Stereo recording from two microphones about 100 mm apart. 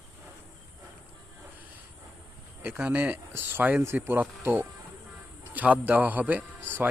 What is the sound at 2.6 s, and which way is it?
A man's voice, 20° right (ahead or behind).